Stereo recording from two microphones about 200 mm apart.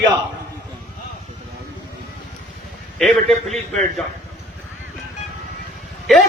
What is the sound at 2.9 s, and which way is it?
Speech, centre (ahead or behind).